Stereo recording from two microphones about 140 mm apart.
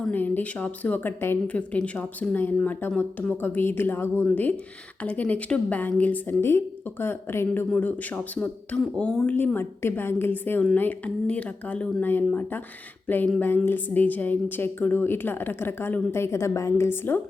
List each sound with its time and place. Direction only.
0.0 s speech: 10° left (ahead or behind)